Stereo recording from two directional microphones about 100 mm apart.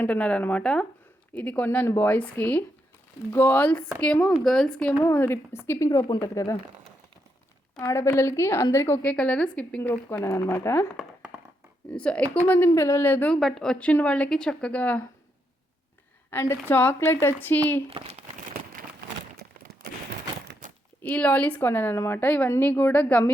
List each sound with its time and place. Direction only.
0.0 s a woman's voice: 15° left (ahead or behind)
5.0 s a woman's voice: 20° left (ahead or behind)
7.8 s a woman's voice: 30° left (ahead or behind)
9.0 s a woman's voice: 15° left (ahead or behind)
10.2 s speech: 30° left (ahead or behind)
12.0 s a woman's voice: 10° left (ahead or behind)
13.3 s a woman's voice: 5° left (ahead or behind)
16.3 s a woman's voice: 25° left (ahead or behind)
17.8 s speech: 85° right
21.0 s a woman's voice: 15° left (ahead or behind)